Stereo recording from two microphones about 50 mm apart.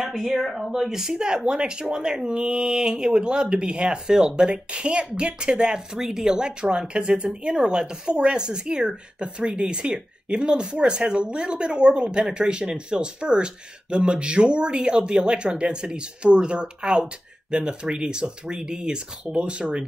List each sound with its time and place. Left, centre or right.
0.1 s speech: centre; by 19.8 s right